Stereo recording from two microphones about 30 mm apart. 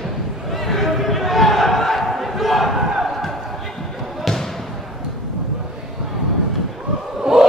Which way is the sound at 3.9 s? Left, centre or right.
Centre.